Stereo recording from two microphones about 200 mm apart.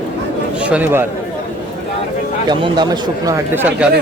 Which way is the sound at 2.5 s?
20° right (ahead or behind).